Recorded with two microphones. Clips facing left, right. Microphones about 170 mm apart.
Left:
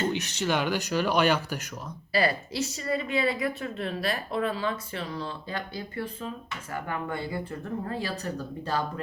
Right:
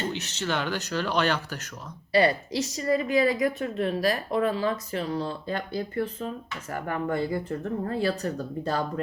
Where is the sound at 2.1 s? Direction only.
35° right (ahead or behind).